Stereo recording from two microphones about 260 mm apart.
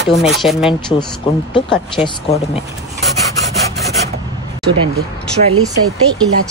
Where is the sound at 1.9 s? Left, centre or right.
Centre.